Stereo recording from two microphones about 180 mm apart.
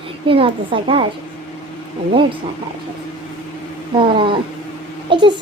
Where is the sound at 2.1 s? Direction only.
30° right (ahead or behind).